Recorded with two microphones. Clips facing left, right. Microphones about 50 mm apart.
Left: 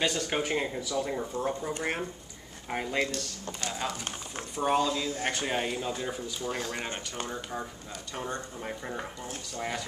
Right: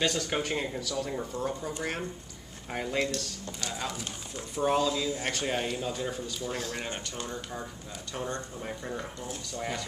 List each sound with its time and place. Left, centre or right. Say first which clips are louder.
0.0 s speech: even; centre
4.6 s speech: even; centre
8.1 s speech: right 1 dB; centre